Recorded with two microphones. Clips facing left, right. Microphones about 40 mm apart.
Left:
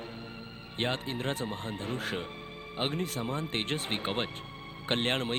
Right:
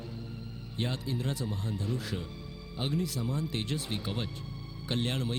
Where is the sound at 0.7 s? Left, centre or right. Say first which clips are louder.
Left 2 dB; left.